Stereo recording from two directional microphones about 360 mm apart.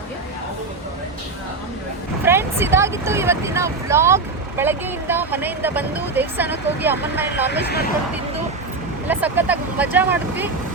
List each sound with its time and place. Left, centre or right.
2.2 s speech: centre
7.6 s speech: left
9.0 s speech: centre